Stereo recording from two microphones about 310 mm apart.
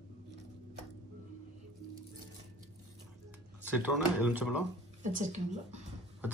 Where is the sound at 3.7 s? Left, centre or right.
Centre.